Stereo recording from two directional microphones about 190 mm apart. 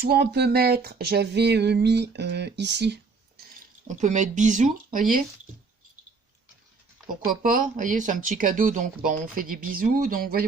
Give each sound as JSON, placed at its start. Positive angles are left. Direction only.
{"t": 0.0, "sound": "speech", "side_deg": -55}
{"t": 3.8, "sound": "speech", "side_deg": -40}
{"t": 7.1, "sound": "speech", "side_deg": -45}